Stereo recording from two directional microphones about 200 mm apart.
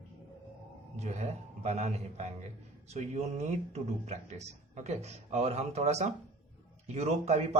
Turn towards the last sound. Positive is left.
turn(degrees=-35)  # may be behind; listen again after turning